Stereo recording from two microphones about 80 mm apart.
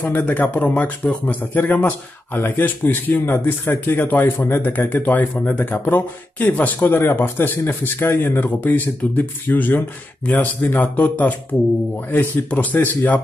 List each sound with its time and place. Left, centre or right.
0.0 s speech: left